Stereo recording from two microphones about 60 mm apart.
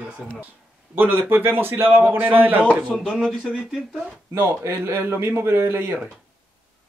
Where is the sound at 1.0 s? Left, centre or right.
Right.